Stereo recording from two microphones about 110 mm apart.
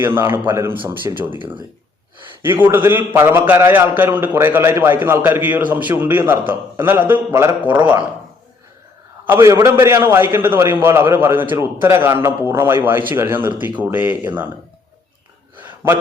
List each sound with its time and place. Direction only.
0.0 s a man's voice: 20° right (ahead or behind)
2.4 s a man's voice: 20° right (ahead or behind)
9.2 s a man's voice: 20° right (ahead or behind)
15.5 s gasp: 20° right (ahead or behind)